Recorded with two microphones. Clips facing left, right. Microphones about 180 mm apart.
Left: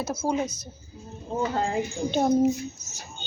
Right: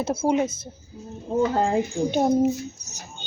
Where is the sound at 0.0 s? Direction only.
30° right (ahead or behind).